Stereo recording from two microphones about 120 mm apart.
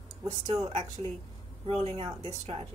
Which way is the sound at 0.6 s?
60° right (ahead or behind).